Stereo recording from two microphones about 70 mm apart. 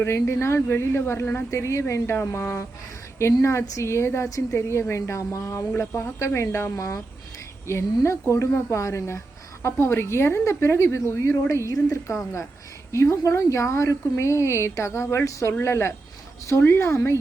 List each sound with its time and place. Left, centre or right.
0.0 s a woman's voice: left